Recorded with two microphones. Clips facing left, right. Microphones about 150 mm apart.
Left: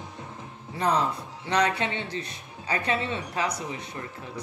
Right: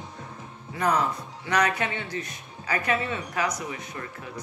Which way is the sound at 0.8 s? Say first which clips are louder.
Even; 30° left (ahead or behind).